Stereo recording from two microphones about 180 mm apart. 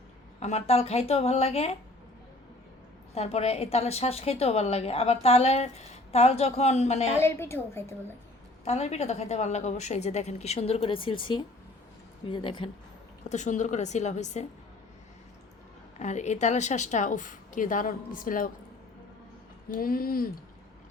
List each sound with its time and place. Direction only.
0.3 s a woman's voice: 35° left (ahead or behind)
3.2 s a woman's voice: 35° left (ahead or behind)
7.2 s a woman's voice: 15° left (ahead or behind)
8.6 s a woman's voice: 35° left (ahead or behind)
13.2 s a woman's voice: 40° left (ahead or behind)
16.0 s a woman's voice: 40° left (ahead or behind)
19.7 s speech: 55° left (ahead or behind)